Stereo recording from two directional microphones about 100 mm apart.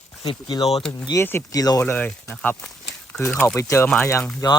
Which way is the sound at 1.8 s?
20° left (ahead or behind).